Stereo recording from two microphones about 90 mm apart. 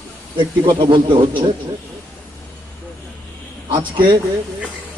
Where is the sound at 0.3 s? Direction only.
65° right (ahead or behind).